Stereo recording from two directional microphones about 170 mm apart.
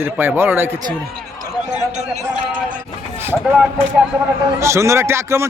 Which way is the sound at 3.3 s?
5° right (ahead or behind).